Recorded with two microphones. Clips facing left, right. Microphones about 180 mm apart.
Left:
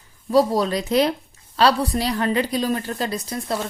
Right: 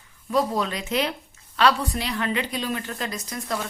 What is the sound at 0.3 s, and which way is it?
A woman's voice, 35° left (ahead or behind).